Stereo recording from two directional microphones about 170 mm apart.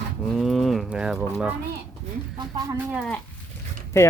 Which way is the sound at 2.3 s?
25° right (ahead or behind).